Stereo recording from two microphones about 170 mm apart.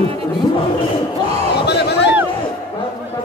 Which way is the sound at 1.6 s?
80° left.